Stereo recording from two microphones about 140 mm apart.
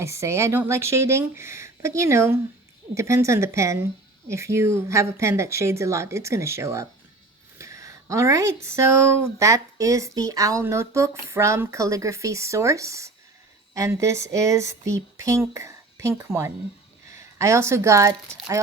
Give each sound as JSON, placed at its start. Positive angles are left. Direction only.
{"t": 0.0, "sound": "speech", "side_deg": -20}